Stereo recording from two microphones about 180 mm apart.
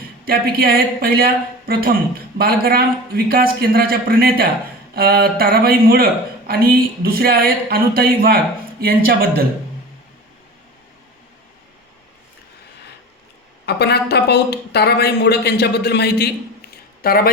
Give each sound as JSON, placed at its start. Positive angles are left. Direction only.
{"t": 0.3, "sound": "speech", "side_deg": -55}
{"t": 13.7, "sound": "a man's voice", "side_deg": 65}